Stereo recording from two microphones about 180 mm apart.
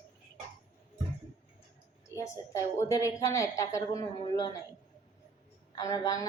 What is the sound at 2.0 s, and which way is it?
A woman's voice, 15° left (ahead or behind).